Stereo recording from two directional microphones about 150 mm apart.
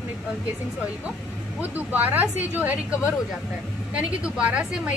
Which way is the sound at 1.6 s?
10° right (ahead or behind).